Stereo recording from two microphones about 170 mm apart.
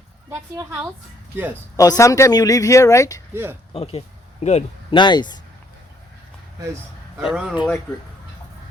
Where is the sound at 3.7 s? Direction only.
35° left (ahead or behind).